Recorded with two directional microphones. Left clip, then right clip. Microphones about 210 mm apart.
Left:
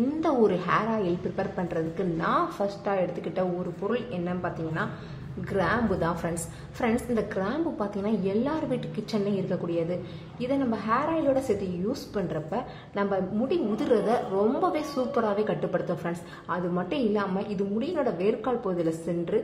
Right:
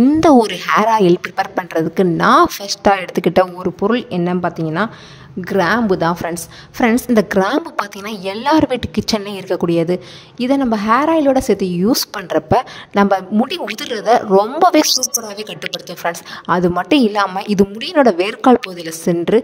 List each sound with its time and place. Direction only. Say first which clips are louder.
0.2 s speech: right 12 dB; 55° right (ahead or behind)
15.0 s a woman's voice: right 5 dB; centre (ahead or behind)
16.0 s speech: right 13 dB; 50° right (ahead or behind)